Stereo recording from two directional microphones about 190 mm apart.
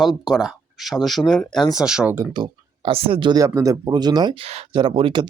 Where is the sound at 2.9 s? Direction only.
30° right (ahead or behind).